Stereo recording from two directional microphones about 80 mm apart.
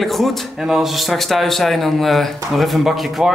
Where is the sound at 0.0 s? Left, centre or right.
Centre.